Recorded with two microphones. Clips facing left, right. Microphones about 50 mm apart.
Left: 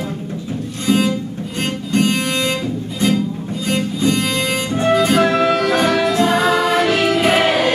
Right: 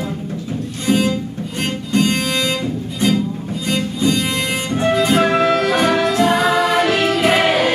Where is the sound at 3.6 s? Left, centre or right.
Left.